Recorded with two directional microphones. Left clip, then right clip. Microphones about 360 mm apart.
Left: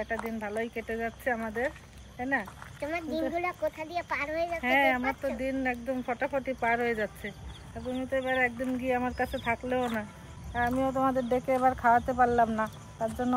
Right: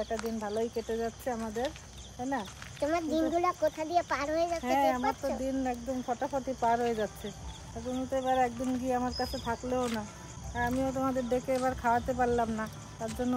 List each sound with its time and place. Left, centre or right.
0.4 s speech: centre
2.8 s speech: centre
4.7 s speech: centre